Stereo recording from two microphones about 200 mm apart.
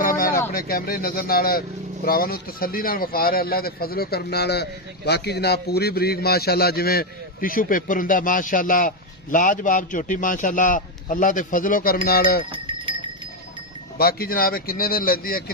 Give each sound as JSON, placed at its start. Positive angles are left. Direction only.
{"t": 0.0, "sound": "a sound", "side_deg": 45}
{"t": 0.5, "sound": "a man's voice", "side_deg": 45}
{"t": 12.5, "sound": "sheep", "side_deg": -25}
{"t": 14.0, "sound": "a man's voice", "side_deg": 50}